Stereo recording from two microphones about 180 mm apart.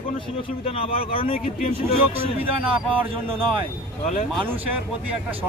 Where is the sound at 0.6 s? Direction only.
30° left (ahead or behind).